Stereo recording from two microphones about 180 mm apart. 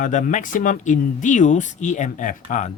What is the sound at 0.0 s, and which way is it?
Speech, 45° left (ahead or behind).